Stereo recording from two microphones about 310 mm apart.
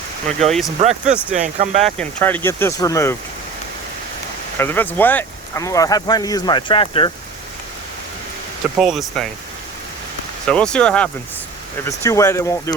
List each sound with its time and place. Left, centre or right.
0.3 s speech: centre
0.8 s speech: right
1.1 s speech: centre
1.5 s speech: right
1.8 s speech: centre
4.5 s speech: centre
8.8 s speech: centre
10.4 s speech: centre